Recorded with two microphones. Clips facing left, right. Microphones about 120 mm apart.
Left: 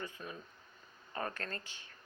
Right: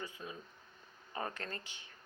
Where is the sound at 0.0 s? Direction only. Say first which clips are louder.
Left 1 dB; 15° right (ahead or behind).